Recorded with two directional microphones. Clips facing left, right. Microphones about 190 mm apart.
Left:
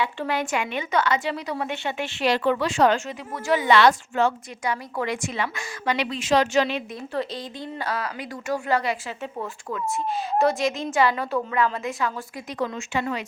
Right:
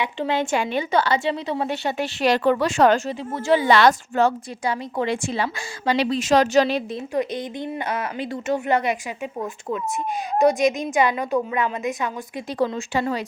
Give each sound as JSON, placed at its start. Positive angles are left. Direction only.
{"t": 0.0, "sound": "a woman's voice", "side_deg": -20}
{"t": 3.1, "sound": "a woman's voice", "side_deg": -30}
{"t": 3.8, "sound": "a woman's voice", "side_deg": -40}
{"t": 7.1, "sound": "a woman's voice", "side_deg": -20}
{"t": 12.5, "sound": "a woman's voice", "side_deg": -35}